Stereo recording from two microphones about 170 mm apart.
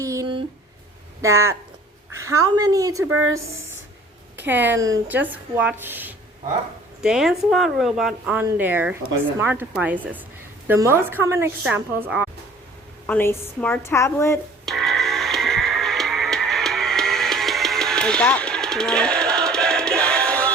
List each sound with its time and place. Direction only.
0.0 s a sound: 20° right (ahead or behind)
1.2 s a woman's voice: 15° right (ahead or behind)
4.4 s a sound: 10° right (ahead or behind)
4.8 s a woman's voice: 15° right (ahead or behind)
13.1 s a woman's voice: 10° left (ahead or behind)
14.6 s music: centre (ahead or behind)